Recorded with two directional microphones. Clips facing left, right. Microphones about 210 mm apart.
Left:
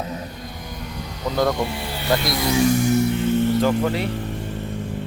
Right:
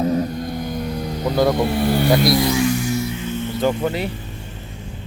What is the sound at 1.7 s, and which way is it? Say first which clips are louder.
Speech: right 12 dB; 50° right (ahead or behind).